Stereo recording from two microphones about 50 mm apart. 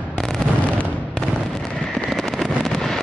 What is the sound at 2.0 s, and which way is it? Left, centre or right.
Fireworks, centre.